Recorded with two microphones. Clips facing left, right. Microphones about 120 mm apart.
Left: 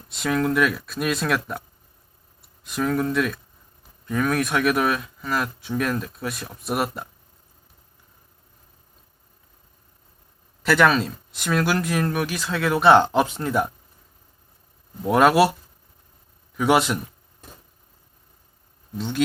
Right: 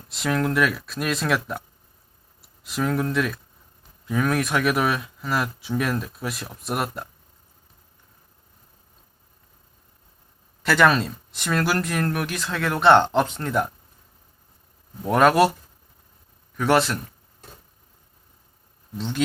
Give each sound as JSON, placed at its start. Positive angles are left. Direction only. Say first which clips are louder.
{"t": 0.1, "sound": "speech", "louder": "left 1 dB", "side_deg": 0}
{"t": 10.6, "sound": "speech", "louder": "even", "side_deg": 0}
{"t": 15.0, "sound": "speech", "louder": "left 1 dB", "side_deg": 5}
{"t": 16.6, "sound": "a man's voice", "louder": "left 1 dB", "side_deg": 10}
{"t": 18.9, "sound": "speech", "louder": "left 2 dB", "side_deg": 0}